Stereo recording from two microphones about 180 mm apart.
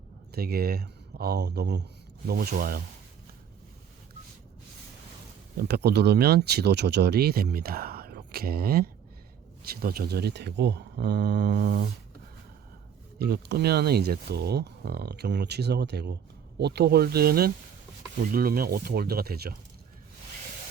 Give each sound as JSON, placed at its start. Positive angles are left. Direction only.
{"t": 0.3, "sound": "speech", "side_deg": -60}
{"t": 5.5, "sound": "speech", "side_deg": -60}
{"t": 13.1, "sound": "speech", "side_deg": -60}